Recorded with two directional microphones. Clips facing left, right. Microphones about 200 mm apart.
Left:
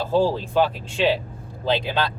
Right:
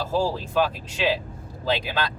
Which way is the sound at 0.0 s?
30° left (ahead or behind).